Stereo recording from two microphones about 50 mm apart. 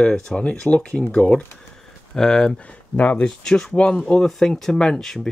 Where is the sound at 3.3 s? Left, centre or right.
Centre.